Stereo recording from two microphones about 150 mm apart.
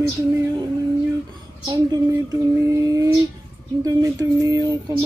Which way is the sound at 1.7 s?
25° right (ahead or behind).